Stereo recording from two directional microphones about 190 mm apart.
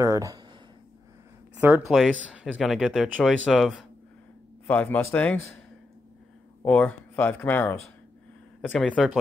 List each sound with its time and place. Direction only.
0.0 s speech: 15° right (ahead or behind)
1.6 s speech: 5° right (ahead or behind)
6.6 s speech: 5° left (ahead or behind)